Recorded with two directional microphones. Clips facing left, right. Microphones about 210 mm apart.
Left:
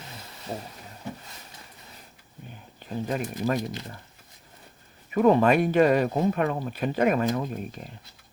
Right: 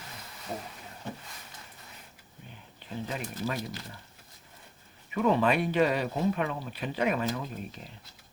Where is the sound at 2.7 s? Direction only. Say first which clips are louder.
Left 7 dB; 45° left (ahead or behind).